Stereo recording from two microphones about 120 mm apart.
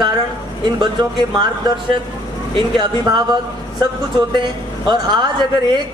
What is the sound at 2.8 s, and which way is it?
Speech, 35° right (ahead or behind).